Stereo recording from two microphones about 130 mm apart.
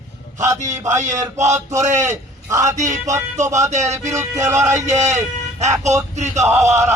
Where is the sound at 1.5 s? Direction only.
25° right (ahead or behind).